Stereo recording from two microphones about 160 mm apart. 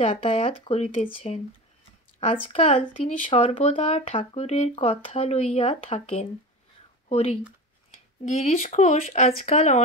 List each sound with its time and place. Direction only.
0.0 s speech: 40° left (ahead or behind)